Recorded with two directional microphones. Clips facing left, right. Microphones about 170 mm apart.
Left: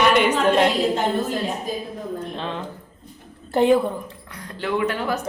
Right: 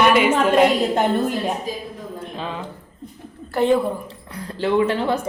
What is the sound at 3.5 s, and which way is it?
Speech, 10° left (ahead or behind).